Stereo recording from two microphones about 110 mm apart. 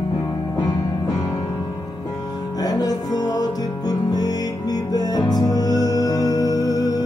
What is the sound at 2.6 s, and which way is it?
Music, 35° left (ahead or behind).